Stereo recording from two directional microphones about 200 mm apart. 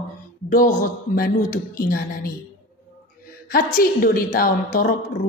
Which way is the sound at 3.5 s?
45° left (ahead or behind).